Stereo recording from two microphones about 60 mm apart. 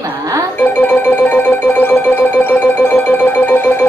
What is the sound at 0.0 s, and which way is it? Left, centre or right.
Music, right.